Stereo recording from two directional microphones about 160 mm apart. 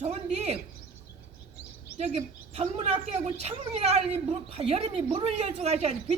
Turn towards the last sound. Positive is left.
turn(degrees=-40)  # may be behind; listen again after turning